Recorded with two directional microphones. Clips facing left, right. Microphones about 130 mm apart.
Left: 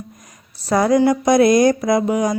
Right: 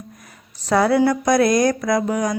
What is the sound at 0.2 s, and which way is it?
Speech, 10° left (ahead or behind).